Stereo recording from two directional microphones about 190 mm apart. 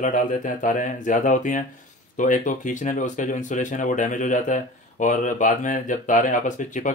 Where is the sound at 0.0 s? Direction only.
45° left (ahead or behind).